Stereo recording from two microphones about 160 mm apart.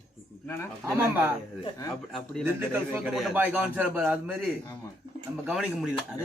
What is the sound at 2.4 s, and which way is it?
Speech, 10° right (ahead or behind).